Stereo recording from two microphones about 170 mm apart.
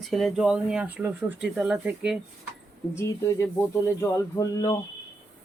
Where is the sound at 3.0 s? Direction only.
15° left (ahead or behind).